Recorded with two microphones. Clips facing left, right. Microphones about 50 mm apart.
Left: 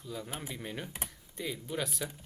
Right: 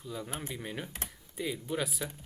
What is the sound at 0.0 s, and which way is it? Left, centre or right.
Speech, centre.